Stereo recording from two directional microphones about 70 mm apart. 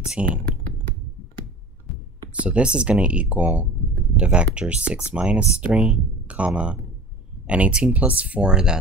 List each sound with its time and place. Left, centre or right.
0.2 s speech: centre
2.4 s speech: centre